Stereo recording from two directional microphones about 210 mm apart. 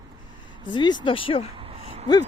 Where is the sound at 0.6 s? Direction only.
20° left (ahead or behind).